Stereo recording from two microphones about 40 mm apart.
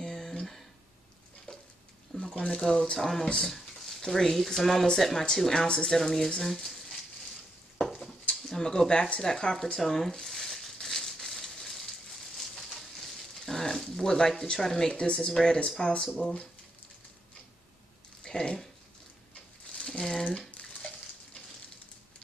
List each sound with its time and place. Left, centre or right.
0.0 s a sound: centre
2.3 s speech: left
3.0 s speech: centre
5.5 s speech: centre
7.8 s a sound: centre
15.1 s speech: centre
18.2 s speech: centre
19.7 s crumpling: left
20.7 s bathtub: left